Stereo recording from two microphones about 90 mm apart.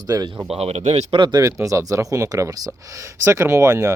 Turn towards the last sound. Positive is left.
turn(degrees=-35)  # may be behind; listen again after turning